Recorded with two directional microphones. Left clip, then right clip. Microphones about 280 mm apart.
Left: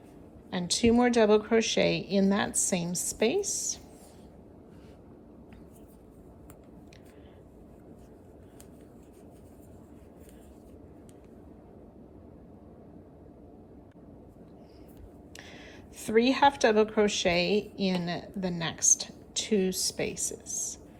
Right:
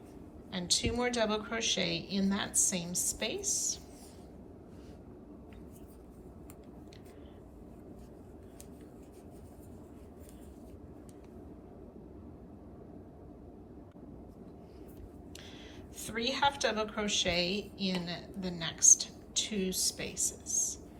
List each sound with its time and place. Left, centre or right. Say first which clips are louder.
0.5 s a woman's voice: left 7 dB; centre
15.4 s a woman's voice: left 4 dB; centre